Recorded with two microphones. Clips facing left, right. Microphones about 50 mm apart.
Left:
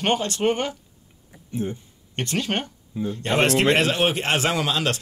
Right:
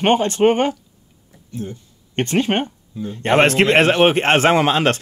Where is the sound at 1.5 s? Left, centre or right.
Left.